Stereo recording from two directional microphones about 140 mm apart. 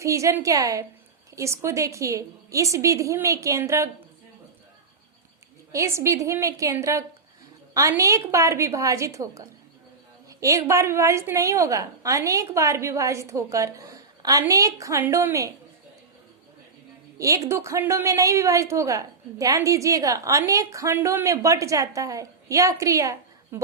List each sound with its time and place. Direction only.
0.0 s a woman's voice: 20° right (ahead or behind)
5.7 s a woman's voice: 20° right (ahead or behind)
17.2 s a woman's voice: 20° right (ahead or behind)